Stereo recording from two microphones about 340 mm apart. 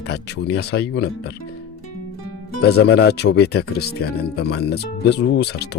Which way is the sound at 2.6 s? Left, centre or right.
Left.